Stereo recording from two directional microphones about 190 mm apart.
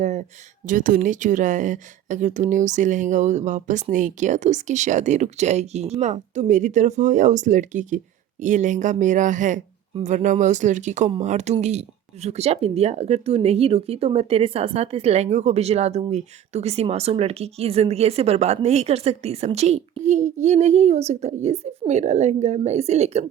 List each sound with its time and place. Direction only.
0.0 s speech: 40° right (ahead or behind)